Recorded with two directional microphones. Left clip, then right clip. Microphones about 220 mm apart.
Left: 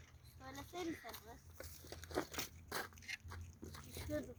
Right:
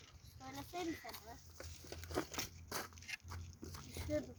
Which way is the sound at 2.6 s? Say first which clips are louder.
Even; 25° right (ahead or behind).